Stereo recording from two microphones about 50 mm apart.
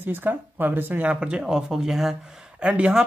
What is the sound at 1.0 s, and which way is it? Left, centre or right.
Speech, right.